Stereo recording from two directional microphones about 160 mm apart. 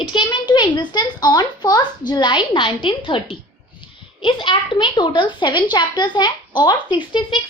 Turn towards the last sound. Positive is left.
turn(degrees=30)  # may be behind; listen again after turning